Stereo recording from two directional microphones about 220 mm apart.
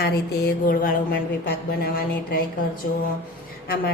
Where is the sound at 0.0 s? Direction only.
40° left (ahead or behind).